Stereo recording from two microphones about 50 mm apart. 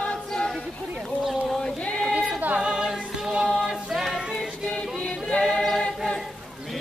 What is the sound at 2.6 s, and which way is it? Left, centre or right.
Music, centre.